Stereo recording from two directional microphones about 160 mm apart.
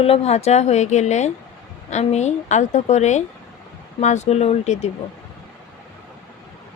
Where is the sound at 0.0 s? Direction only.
40° left (ahead or behind).